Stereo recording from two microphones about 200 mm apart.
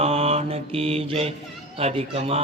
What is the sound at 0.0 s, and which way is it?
Mantra, 30° right (ahead or behind).